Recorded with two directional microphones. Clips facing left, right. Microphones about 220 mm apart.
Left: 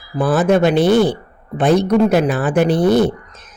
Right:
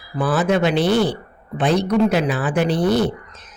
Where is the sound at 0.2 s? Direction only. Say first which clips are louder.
Left 4 dB; 50° left (ahead or behind).